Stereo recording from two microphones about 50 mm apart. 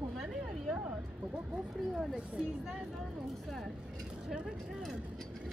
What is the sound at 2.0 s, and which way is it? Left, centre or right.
Speech, centre.